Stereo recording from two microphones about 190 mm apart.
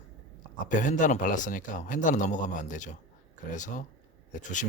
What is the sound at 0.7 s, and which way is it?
Speech, 40° left (ahead or behind).